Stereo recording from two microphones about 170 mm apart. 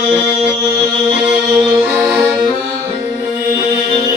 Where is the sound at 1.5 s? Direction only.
5° right (ahead or behind).